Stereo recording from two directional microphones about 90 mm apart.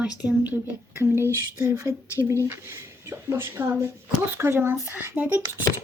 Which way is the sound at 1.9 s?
35° right (ahead or behind).